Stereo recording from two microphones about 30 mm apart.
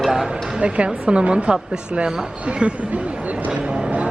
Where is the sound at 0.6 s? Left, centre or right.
Right.